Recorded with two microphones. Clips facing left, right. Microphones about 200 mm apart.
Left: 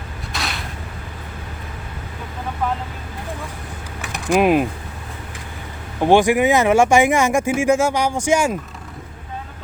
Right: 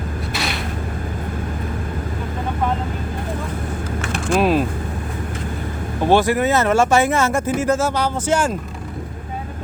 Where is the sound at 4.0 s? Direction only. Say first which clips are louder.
Left 2 dB; 15° left (ahead or behind).